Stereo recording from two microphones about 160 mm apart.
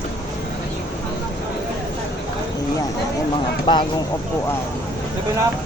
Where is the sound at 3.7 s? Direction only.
30° left (ahead or behind).